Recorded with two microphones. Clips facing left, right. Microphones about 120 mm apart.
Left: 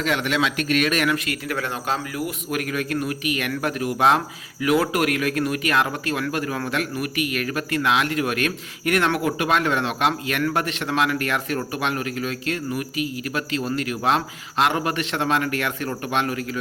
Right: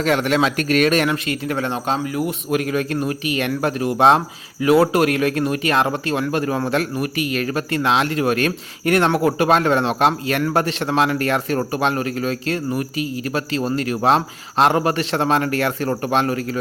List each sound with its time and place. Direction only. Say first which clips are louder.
0.0 s speech: right 5 dB; 40° right (ahead or behind)